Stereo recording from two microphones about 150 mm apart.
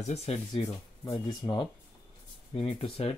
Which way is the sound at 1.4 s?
40° left (ahead or behind).